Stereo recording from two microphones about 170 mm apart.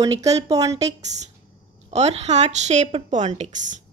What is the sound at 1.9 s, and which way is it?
A woman's voice, 40° right (ahead or behind).